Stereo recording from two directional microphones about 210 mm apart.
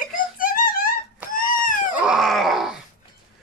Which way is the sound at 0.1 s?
40° left (ahead or behind).